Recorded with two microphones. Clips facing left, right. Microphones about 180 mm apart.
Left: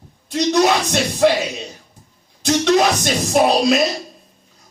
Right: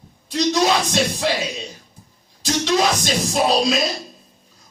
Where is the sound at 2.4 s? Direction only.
60° left (ahead or behind).